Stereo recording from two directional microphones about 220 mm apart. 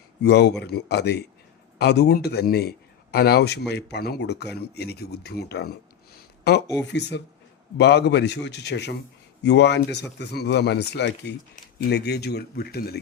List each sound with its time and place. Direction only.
0.2 s speech: 50° left (ahead or behind)